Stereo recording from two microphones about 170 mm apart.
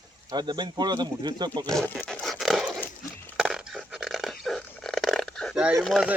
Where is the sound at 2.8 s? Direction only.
10° left (ahead or behind).